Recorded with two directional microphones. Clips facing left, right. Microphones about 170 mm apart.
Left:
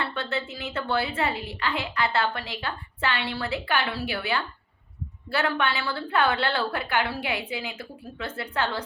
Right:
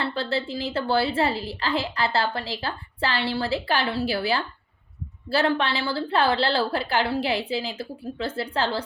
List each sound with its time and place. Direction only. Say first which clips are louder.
0.0 s a woman's voice: right 3 dB; 30° right (ahead or behind)